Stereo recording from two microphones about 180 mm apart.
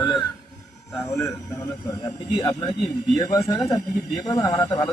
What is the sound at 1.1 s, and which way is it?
Speech, 15° left (ahead or behind).